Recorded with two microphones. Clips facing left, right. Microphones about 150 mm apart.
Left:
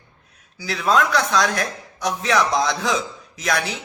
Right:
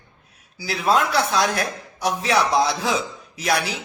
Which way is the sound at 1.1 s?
30° right (ahead or behind).